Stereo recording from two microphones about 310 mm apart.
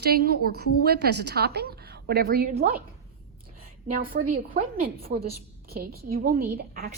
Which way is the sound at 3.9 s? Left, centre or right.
Right.